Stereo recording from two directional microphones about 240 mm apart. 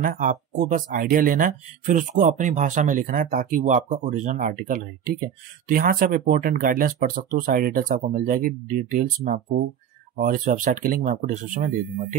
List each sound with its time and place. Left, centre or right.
0.0 s speech: right